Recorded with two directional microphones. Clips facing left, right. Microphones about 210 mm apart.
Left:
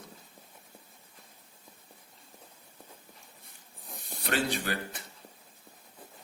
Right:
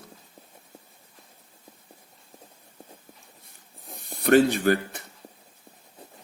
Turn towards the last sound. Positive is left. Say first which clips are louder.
# right 11 dB
turn(degrees=-50)  # may be behind; listen again after turning